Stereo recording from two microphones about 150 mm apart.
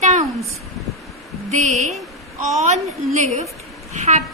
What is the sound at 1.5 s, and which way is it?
A woman's voice, 50° right (ahead or behind).